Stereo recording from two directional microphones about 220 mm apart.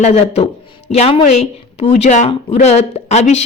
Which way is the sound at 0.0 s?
30° left (ahead or behind).